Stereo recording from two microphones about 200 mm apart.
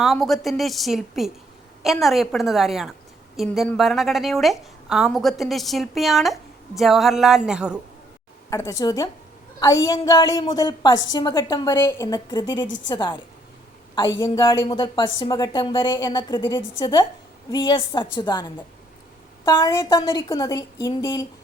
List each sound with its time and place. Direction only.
0.0 s a woman's voice: centre (ahead or behind)
8.4 s a woman's voice: 15° left (ahead or behind)
12.6 s a woman's voice: 65° left (ahead or behind)
12.9 s speech: 20° left (ahead or behind)
14.2 s a woman's voice: 20° left (ahead or behind)